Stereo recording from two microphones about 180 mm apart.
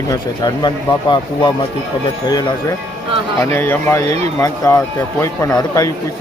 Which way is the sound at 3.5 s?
15° left (ahead or behind).